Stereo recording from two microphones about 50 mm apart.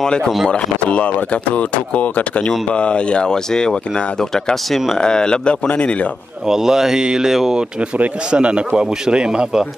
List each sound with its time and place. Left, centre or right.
0.5 s speech: left
4.9 s speech: centre
6.4 s speech: centre
8.3 s a man's voice: right